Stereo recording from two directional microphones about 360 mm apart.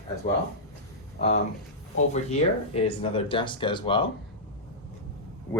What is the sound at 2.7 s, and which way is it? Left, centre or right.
Speech, centre.